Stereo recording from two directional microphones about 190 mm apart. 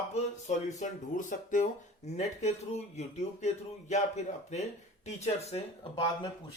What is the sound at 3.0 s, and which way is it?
Speech, 35° left (ahead or behind).